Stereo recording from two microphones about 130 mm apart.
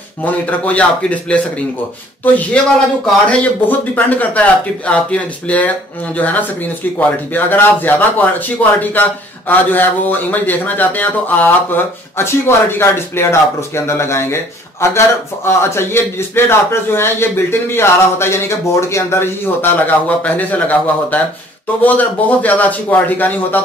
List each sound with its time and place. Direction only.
0.2 s speech: 10° left (ahead or behind)
2.6 s speech: 10° left (ahead or behind)